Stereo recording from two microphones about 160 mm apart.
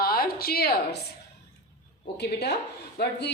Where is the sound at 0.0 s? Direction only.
70° left (ahead or behind).